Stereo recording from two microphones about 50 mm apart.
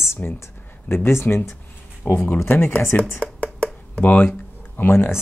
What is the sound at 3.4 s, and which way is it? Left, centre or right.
Computer keyboard, left.